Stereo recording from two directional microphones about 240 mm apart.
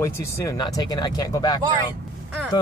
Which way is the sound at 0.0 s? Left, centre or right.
Centre.